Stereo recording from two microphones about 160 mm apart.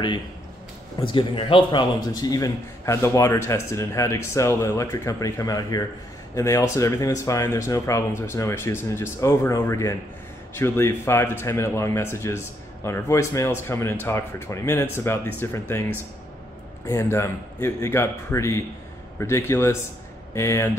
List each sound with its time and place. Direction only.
1.0 s a man's voice: 30° left (ahead or behind); by 20.7 s 15° left (ahead or behind)